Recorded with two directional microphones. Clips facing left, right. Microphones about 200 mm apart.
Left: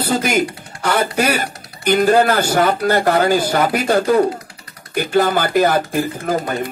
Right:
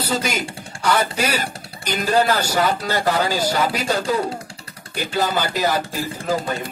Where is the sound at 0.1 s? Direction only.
55° left (ahead or behind).